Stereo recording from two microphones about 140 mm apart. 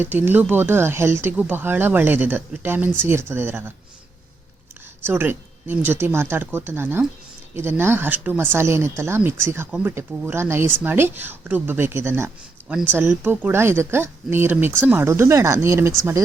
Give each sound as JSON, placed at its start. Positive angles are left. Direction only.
{"t": 0.0, "sound": "speech", "side_deg": -15}
{"t": 5.0, "sound": "speech", "side_deg": -15}